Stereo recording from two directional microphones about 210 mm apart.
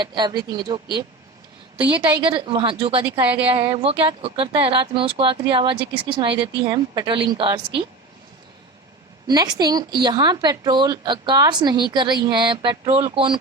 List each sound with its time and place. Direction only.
0.0 s speech: 20° right (ahead or behind)
9.2 s speech: 20° right (ahead or behind)